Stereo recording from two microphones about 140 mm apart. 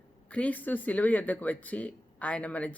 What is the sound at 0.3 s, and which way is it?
Speech, 10° left (ahead or behind).